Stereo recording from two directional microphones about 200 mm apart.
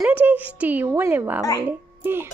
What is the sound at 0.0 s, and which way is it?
A child's voice, 10° right (ahead or behind).